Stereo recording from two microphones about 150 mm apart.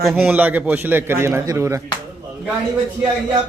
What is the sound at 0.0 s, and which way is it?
A man's voice, 10° right (ahead or behind).